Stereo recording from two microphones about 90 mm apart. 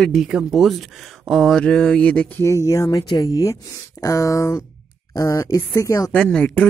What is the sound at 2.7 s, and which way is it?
Speech, 40° left (ahead or behind).